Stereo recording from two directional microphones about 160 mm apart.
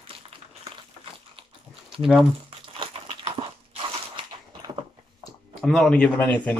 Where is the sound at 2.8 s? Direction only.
35° right (ahead or behind).